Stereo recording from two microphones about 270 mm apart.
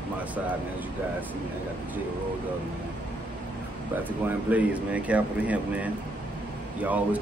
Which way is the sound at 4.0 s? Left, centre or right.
Centre.